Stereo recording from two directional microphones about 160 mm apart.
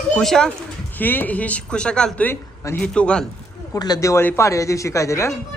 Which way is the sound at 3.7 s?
25° left (ahead or behind).